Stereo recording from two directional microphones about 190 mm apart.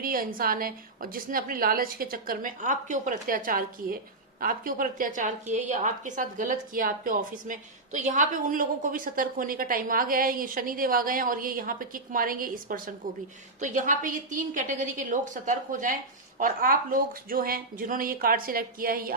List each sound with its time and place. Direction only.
0.0 s a woman's voice: 50° right (ahead or behind)